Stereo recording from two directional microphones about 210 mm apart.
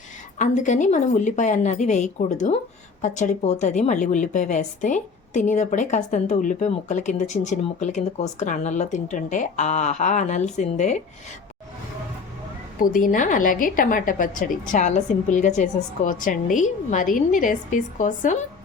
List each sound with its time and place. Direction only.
0.3 s a woman's voice: 35° left (ahead or behind)
12.8 s a woman's voice: 40° left (ahead or behind)